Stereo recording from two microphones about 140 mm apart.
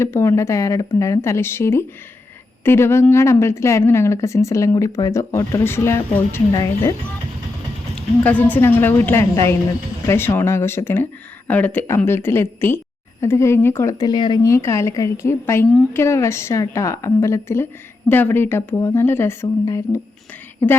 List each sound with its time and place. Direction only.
0.0 s a woman's voice: 20° left (ahead or behind)
7.9 s a woman's voice: 10° left (ahead or behind); by 14.5 s 30° left (ahead or behind)
14.5 s a woman's voice: 20° left (ahead or behind)